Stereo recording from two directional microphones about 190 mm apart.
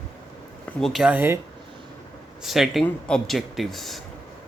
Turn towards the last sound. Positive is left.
turn(degrees=0)  # may be behind; listen again after turning